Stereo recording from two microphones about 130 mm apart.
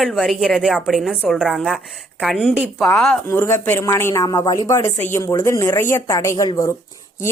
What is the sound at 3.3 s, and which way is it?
Speech, 20° left (ahead or behind).